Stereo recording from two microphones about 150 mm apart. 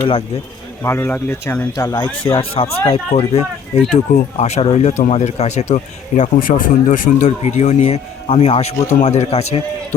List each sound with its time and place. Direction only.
0.8 s speech: 15° left (ahead or behind); by 9.6 s 45° left (ahead or behind)